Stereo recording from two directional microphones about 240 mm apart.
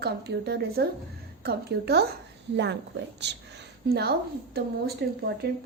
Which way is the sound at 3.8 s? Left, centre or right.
Right.